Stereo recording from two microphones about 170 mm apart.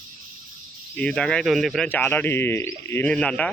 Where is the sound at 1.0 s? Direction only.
5° left (ahead or behind).